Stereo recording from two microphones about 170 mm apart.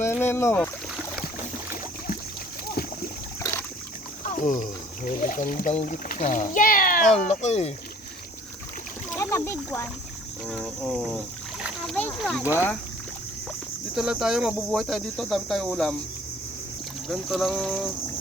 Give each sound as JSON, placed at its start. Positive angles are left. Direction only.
{"t": 0.0, "sound": "rowboat", "side_deg": 15}
{"t": 4.2, "sound": "speech", "side_deg": 50}
{"t": 9.1, "sound": "speech", "side_deg": 15}
{"t": 10.4, "sound": "speech", "side_deg": 5}
{"t": 13.9, "sound": "speech", "side_deg": -5}
{"t": 17.1, "sound": "speech", "side_deg": 0}